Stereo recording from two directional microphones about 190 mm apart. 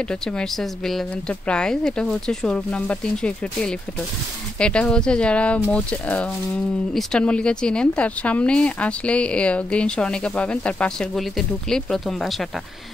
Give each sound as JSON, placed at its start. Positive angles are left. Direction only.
{"t": 0.1, "sound": "speech", "side_deg": 5}